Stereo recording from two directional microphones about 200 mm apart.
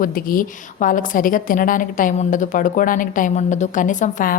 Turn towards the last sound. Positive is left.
turn(degrees=40)  # may be behind; listen again after turning